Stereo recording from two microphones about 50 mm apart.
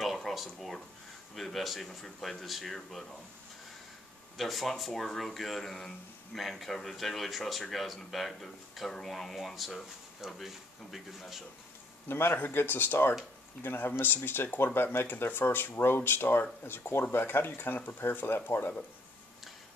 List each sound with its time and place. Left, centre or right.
0.0 s a sound: centre
1.3 s speech: centre
4.4 s speech: centre
12.1 s speech: left